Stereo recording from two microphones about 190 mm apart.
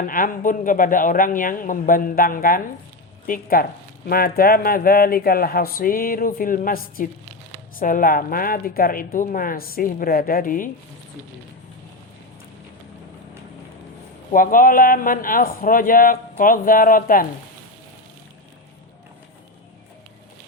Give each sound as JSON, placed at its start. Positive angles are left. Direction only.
{"t": 0.0, "sound": "speech", "side_deg": 45}
{"t": 14.3, "sound": "speech", "side_deg": 45}